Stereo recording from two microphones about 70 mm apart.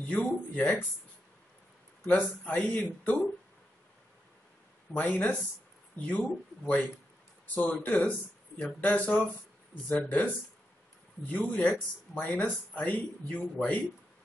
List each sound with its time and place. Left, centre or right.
0.0 s speech: centre
2.0 s speech: left
4.9 s speech: left
11.3 s speech: centre